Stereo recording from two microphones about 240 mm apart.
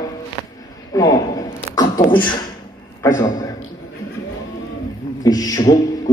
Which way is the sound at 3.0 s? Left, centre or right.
Centre.